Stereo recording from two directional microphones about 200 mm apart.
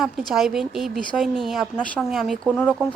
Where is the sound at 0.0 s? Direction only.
Centre (ahead or behind).